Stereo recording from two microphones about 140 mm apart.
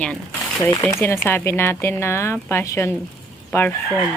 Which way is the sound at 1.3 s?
15° left (ahead or behind).